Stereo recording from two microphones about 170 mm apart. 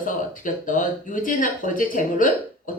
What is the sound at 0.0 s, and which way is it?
A woman's voice, 50° left (ahead or behind).